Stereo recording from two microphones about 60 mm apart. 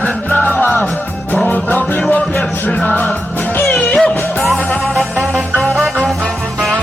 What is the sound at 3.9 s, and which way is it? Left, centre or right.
Music, centre.